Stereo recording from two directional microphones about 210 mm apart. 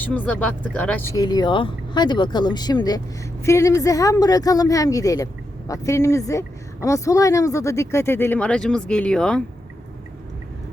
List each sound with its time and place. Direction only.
0.0 s a woman's voice: 5° left (ahead or behind)